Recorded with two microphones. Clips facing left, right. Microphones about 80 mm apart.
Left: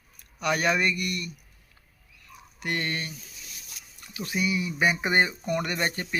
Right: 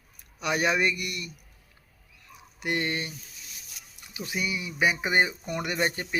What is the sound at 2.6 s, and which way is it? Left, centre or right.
Speech, right.